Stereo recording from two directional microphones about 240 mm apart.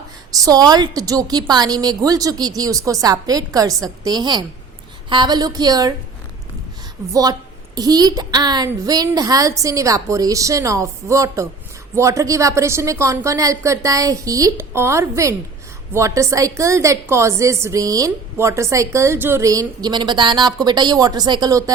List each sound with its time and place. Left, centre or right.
0.3 s a woman's voice: centre
7.1 s a woman's voice: centre